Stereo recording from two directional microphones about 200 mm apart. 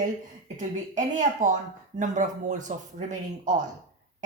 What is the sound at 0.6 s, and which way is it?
Speech, 40° right (ahead or behind).